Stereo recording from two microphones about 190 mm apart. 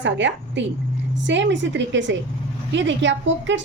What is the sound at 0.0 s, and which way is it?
A woman's voice, 75° right (ahead or behind).